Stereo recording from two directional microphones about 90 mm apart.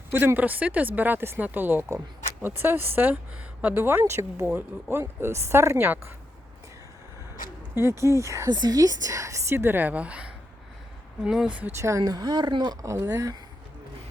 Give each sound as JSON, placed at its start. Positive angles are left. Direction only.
{"t": 0.1, "sound": "speech", "side_deg": -25}
{"t": 7.8, "sound": "a woman's voice", "side_deg": -30}
{"t": 8.4, "sound": "a woman's voice", "side_deg": -50}
{"t": 11.8, "sound": "speech", "side_deg": -35}
{"t": 13.1, "sound": "a woman's voice", "side_deg": -35}